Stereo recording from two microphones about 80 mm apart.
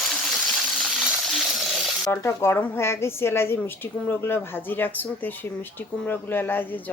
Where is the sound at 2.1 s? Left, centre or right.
Left.